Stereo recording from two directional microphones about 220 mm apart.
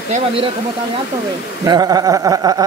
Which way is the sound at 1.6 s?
15° right (ahead or behind).